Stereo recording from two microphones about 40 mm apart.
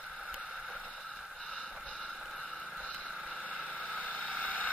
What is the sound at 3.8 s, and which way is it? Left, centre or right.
Vehicle, left.